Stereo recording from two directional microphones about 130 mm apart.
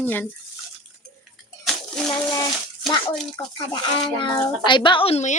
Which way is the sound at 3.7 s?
40° left (ahead or behind).